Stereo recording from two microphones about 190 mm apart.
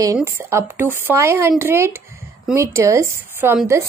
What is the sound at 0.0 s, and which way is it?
A woman's voice, 15° right (ahead or behind).